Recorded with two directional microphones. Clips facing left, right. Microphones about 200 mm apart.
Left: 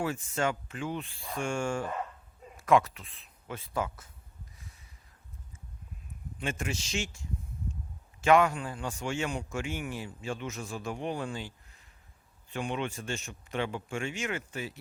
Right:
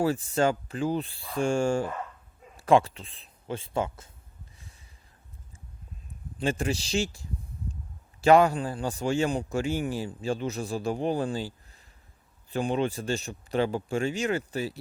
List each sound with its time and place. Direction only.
0.0 s a man's voice: 35° right (ahead or behind)
4.5 s snort: 30° right (ahead or behind)
6.4 s a man's voice: 35° right (ahead or behind)